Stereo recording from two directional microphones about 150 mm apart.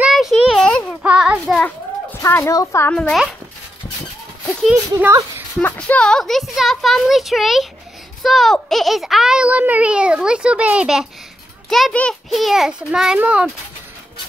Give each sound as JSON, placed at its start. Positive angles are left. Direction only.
{"t": 0.0, "sound": "a sound", "side_deg": 0}
{"t": 1.0, "sound": "a child's voice", "side_deg": -10}
{"t": 2.2, "sound": "a woman's voice", "side_deg": 20}
{"t": 2.9, "sound": "a child's voice", "side_deg": 5}
{"t": 5.6, "sound": "a child's voice", "side_deg": 10}